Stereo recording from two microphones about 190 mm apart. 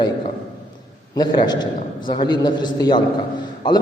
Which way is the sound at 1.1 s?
20° left (ahead or behind).